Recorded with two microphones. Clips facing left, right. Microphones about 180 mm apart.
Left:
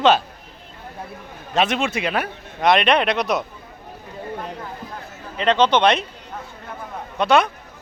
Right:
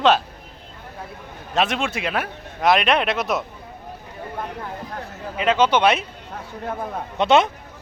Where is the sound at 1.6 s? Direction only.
Centre (ahead or behind).